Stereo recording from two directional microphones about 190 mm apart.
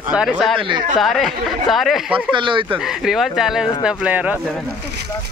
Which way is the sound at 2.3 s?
25° right (ahead or behind).